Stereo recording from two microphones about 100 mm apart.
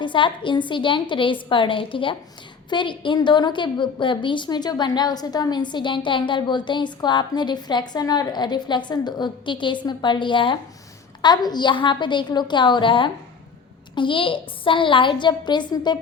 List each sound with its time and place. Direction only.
0.0 s a woman's voice: 55° left (ahead or behind)